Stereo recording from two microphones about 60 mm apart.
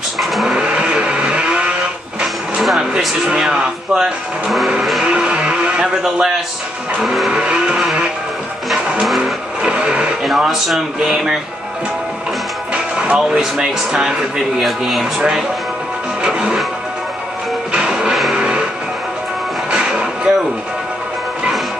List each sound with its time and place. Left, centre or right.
0.2 s vehicle: centre
0.6 s vehicle: centre
2.5 s a sound: centre
3.3 s music: centre
6.0 s speech: centre
7.0 s music: centre
9.2 s vehicle: centre
10.2 s music: centre
12.7 s music: centre
14.6 s speech: centre
16.2 s music: centre
17.7 s music: centre
19.7 s music: centre